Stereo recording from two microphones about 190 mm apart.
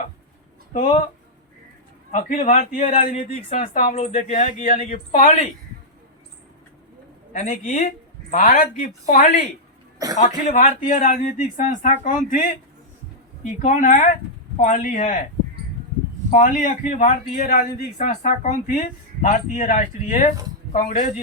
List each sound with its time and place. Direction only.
0.7 s a man's voice: 40° left (ahead or behind)
2.1 s a man's voice: 40° left (ahead or behind)
7.3 s a man's voice: 45° left (ahead or behind)
16.3 s a man's voice: 45° left (ahead or behind)